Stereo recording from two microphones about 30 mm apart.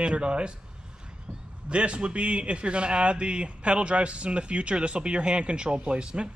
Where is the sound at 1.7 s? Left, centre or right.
Right.